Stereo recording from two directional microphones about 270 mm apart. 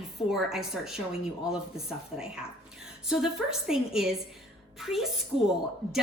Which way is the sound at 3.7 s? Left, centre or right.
Centre.